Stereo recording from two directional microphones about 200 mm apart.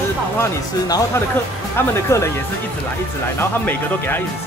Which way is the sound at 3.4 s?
10° left (ahead or behind).